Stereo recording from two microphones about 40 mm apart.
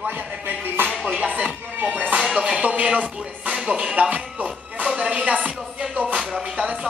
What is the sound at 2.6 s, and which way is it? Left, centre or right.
Music, right.